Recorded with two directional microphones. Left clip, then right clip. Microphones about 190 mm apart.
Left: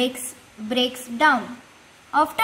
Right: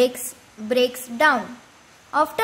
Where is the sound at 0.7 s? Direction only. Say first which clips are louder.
Right 3 dB; 35° right (ahead or behind).